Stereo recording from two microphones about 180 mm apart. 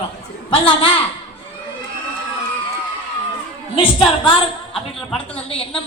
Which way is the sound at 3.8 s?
30° left (ahead or behind).